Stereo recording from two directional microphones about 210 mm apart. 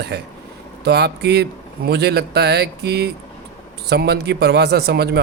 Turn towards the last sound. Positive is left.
turn(degrees=-50)  # may be behind; listen again after turning